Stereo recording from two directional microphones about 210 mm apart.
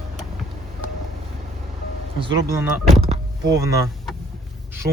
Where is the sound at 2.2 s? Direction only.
20° right (ahead or behind).